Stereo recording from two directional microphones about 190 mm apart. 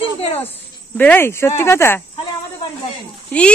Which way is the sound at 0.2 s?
30° left (ahead or behind).